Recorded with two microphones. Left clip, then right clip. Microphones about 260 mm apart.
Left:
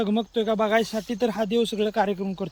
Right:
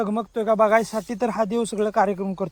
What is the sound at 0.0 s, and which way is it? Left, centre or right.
Speech, centre.